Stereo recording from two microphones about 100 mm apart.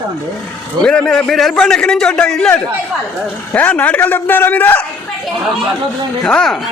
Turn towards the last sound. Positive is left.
turn(degrees=10)  # may be behind; listen again after turning